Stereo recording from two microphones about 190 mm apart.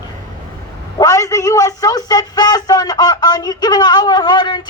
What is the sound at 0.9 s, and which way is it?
A man's voice, 20° left (ahead or behind).